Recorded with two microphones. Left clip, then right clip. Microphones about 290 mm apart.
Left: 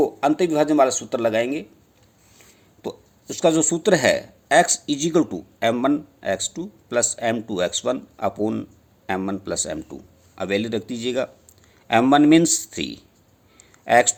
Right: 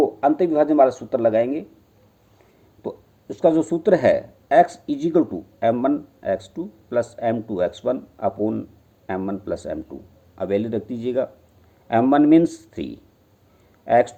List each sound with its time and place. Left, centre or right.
0.0 s speech: left
2.8 s speech: left